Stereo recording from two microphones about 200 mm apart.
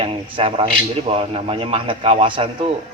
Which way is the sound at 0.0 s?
25° right (ahead or behind).